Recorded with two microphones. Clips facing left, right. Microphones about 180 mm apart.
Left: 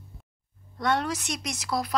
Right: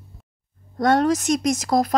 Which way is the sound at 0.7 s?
45° right (ahead or behind).